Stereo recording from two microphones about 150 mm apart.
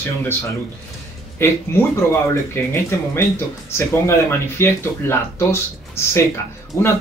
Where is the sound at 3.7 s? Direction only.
15° left (ahead or behind).